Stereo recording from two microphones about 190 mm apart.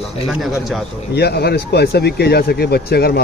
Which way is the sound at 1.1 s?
60° left (ahead or behind).